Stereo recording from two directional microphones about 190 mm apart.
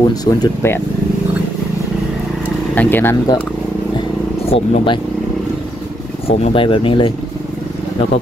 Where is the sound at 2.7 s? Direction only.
10° left (ahead or behind).